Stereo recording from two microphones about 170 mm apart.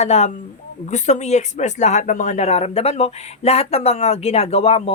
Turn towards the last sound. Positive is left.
turn(degrees=35)  # may be behind; listen again after turning